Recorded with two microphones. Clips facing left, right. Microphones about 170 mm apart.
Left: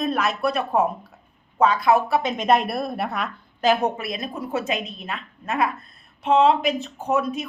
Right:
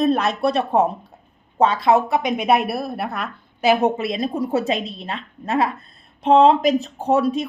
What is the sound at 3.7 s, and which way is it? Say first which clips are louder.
A woman's voice: right 5 dB; 20° right (ahead or behind).